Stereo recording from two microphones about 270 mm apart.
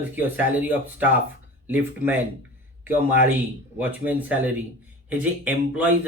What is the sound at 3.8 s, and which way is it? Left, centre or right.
Speech, centre.